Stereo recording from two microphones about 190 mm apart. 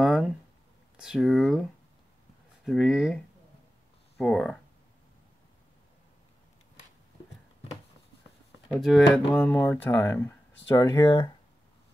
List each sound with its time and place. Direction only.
0.0 s a sound: centre (ahead or behind)
0.9 s speech: 5° right (ahead or behind)
4.2 s speech: centre (ahead or behind)
8.7 s speech: centre (ahead or behind); by 11.3 s 20° left (ahead or behind)